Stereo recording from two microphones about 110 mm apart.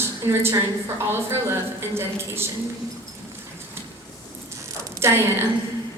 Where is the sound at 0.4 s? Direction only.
25° right (ahead or behind).